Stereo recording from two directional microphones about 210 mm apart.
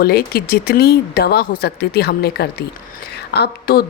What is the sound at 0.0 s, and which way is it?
Speech, 45° left (ahead or behind).